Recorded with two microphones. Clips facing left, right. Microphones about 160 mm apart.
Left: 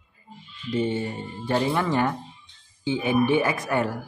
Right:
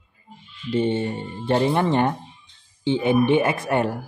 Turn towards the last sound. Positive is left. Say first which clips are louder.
# right 3 dB
turn(degrees=-30)  # may be behind; listen again after turning